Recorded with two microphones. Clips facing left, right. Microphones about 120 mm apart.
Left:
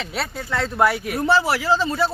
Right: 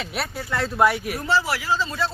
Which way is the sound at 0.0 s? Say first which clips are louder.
Left 1 dB; 5° right (ahead or behind).